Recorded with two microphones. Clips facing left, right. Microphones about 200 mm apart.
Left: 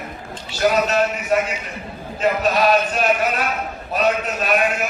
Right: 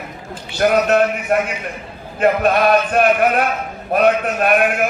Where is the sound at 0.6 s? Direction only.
55° right (ahead or behind).